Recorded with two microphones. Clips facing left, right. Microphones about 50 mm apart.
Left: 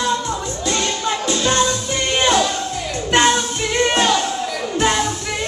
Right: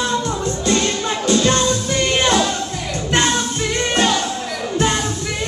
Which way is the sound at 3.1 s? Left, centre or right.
Left.